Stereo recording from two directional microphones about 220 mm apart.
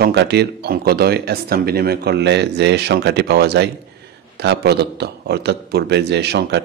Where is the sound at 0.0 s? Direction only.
50° right (ahead or behind).